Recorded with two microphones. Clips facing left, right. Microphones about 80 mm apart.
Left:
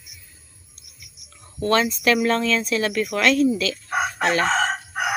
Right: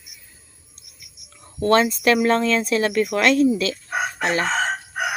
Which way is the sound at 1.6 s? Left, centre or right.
Right.